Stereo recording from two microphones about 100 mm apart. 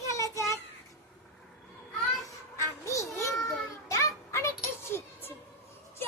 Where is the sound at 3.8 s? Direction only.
30° left (ahead or behind).